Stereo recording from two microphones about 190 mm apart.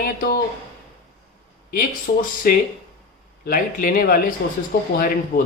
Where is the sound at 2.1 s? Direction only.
55° left (ahead or behind).